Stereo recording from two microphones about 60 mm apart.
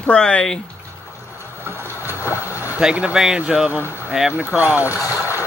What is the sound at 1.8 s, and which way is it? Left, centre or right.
Boat, left.